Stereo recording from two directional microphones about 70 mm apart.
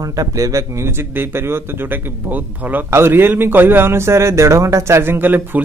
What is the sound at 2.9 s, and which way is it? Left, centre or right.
A man's voice, right.